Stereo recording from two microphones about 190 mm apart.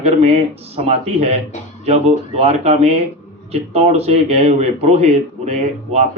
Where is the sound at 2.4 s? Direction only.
35° right (ahead or behind).